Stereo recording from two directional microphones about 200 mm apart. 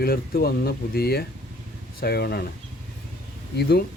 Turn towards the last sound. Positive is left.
turn(degrees=50)  # may be behind; listen again after turning